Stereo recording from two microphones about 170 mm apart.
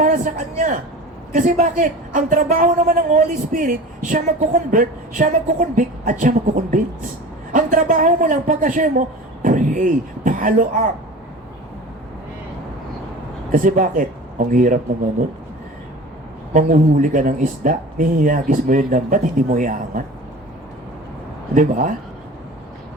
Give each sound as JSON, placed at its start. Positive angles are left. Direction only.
{"t": 0.0, "sound": "a man's voice", "side_deg": -50}
{"t": 13.5, "sound": "speech", "side_deg": -50}
{"t": 16.6, "sound": "a woman's voice", "side_deg": -50}
{"t": 21.5, "sound": "a woman's voice", "side_deg": -50}